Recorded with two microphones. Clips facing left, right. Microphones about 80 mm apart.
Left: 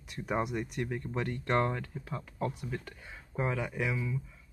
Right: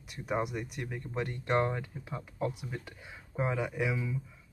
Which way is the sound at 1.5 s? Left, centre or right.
Centre.